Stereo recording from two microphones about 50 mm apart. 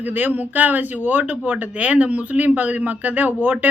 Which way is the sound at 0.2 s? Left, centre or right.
Right.